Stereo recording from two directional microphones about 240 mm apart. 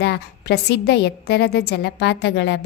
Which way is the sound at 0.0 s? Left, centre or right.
Left.